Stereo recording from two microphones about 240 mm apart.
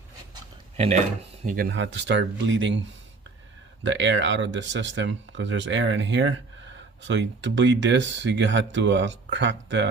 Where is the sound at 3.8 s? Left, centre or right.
Right.